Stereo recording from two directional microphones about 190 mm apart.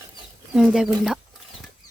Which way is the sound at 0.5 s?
Centre (ahead or behind).